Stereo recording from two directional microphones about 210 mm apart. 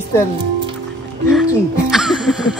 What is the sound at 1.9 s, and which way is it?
Music, centre (ahead or behind).